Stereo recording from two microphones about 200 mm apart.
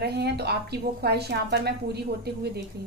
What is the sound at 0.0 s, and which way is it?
A woman's voice, 55° right (ahead or behind).